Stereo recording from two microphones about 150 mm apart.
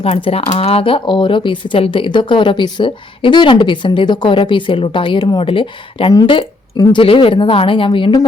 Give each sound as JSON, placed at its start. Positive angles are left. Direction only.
{"t": 0.0, "sound": "speech", "side_deg": 40}